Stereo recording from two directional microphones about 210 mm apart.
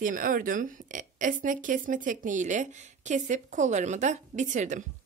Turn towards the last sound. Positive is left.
turn(degrees=-35)  # may be behind; listen again after turning